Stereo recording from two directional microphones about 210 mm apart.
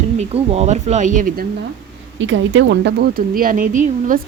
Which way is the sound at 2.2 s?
65° right (ahead or behind).